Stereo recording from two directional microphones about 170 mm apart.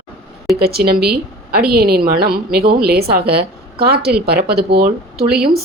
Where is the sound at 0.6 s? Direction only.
65° right (ahead or behind).